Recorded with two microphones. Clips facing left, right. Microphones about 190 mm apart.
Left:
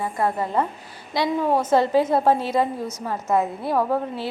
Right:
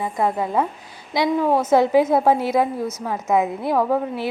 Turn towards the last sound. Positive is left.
turn(degrees=-10)  # may be behind; listen again after turning